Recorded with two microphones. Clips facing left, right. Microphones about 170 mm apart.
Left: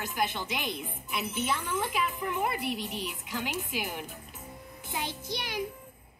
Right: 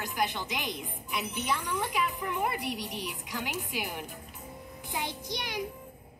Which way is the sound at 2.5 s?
15° right (ahead or behind).